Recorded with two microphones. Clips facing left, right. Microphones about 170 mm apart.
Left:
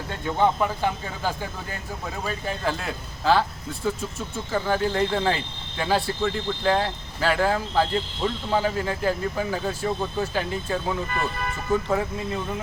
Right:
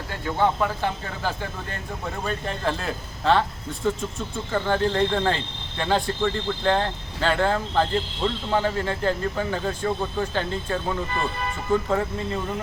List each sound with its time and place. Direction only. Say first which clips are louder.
0.1 s speech: left 1 dB; 15° left (ahead or behind)